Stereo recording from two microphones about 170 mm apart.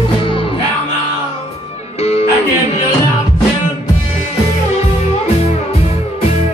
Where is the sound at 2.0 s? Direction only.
35° left (ahead or behind).